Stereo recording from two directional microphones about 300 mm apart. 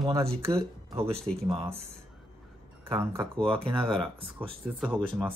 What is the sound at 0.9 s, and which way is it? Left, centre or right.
Speech, centre.